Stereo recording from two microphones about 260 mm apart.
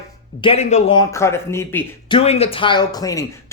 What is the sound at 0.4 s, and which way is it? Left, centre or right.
Speech, left.